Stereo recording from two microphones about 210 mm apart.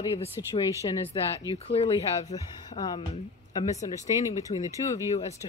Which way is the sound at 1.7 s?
25° left (ahead or behind).